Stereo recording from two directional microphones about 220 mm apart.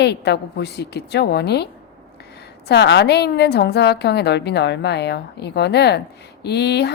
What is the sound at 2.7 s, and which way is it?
A woman's voice, 50° left (ahead or behind).